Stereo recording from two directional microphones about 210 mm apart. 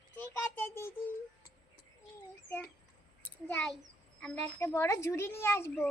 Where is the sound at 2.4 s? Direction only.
10° left (ahead or behind).